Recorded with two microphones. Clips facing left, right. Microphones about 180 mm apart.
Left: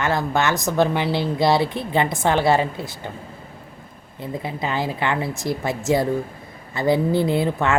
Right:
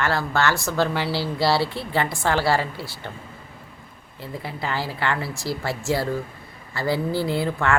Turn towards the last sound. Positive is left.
turn(degrees=20)  # may be behind; listen again after turning